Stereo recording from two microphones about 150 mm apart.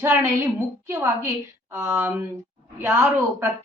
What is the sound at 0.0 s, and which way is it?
A woman's voice, 15° right (ahead or behind).